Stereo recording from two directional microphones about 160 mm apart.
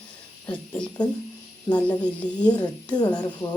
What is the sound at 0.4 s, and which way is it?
Speech, 10° left (ahead or behind).